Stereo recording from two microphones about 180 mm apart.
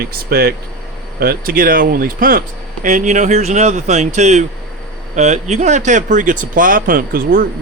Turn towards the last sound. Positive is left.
turn(degrees=-50)  # may be behind; listen again after turning